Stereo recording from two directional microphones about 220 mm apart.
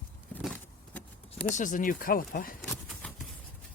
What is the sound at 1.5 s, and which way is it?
Speech, 35° left (ahead or behind).